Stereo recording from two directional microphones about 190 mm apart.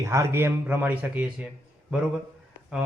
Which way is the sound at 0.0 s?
15° right (ahead or behind).